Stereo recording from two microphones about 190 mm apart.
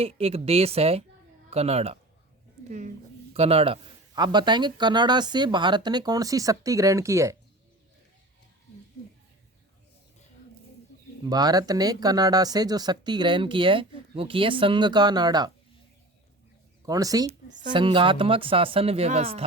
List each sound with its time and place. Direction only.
0.0 s speech: 30° right (ahead or behind); by 7.3 s 15° right (ahead or behind)
11.3 s speech: 20° right (ahead or behind)
16.8 s speech: 20° right (ahead or behind)